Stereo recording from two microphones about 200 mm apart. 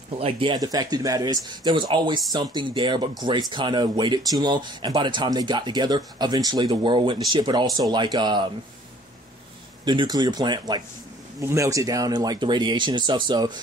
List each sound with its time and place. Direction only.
0.2 s speech: 25° right (ahead or behind)
9.8 s speech: 20° right (ahead or behind)